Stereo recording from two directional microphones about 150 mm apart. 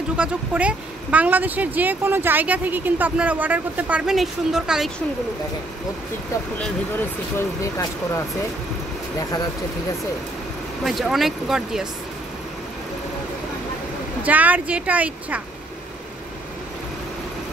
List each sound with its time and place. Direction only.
0.2 s speech: 10° right (ahead or behind)
7.3 s speech: 20° left (ahead or behind)
10.8 s speech: centre (ahead or behind)
14.2 s speech: 10° right (ahead or behind)